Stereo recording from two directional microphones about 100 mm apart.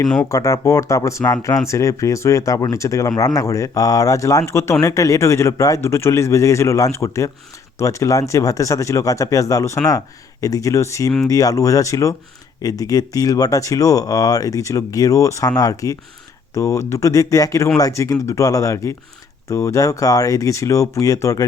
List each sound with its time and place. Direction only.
0.3 s speech: 35° left (ahead or behind)